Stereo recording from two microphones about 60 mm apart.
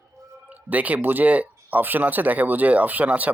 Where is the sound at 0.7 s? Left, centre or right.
Right.